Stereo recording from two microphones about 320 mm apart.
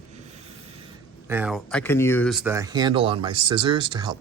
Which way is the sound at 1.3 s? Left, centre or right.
Centre.